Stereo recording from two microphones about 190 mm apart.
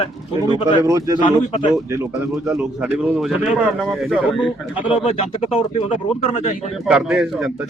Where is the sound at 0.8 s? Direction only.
15° right (ahead or behind).